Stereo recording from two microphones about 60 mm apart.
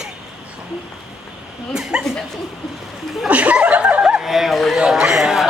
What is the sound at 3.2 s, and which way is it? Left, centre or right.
Chuckle, right.